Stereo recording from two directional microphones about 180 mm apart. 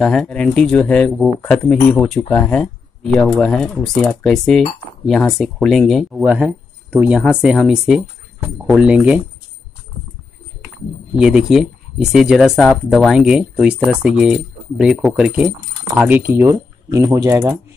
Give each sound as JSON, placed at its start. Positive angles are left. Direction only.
{"t": 0.0, "sound": "speech", "side_deg": 0}
{"t": 11.1, "sound": "speech", "side_deg": -5}